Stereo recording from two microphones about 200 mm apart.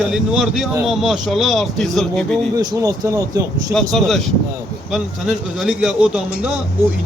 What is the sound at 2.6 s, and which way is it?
Speech, 15° right (ahead or behind).